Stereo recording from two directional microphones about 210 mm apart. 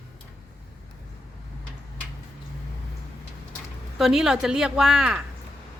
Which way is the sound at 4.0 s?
Centre (ahead or behind).